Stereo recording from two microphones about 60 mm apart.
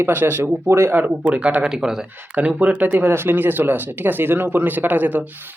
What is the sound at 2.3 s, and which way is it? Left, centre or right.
Speech, right.